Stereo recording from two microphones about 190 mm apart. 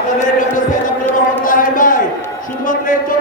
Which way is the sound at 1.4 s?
45° left (ahead or behind).